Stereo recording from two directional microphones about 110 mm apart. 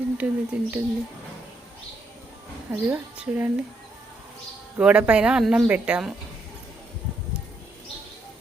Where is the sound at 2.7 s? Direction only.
15° right (ahead or behind).